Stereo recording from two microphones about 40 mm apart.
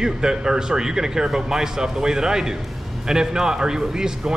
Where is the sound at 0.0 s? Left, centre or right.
Centre.